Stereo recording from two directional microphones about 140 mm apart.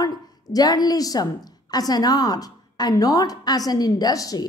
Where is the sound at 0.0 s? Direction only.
25° left (ahead or behind).